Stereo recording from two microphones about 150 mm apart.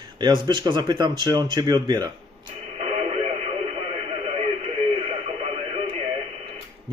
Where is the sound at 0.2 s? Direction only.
30° right (ahead or behind).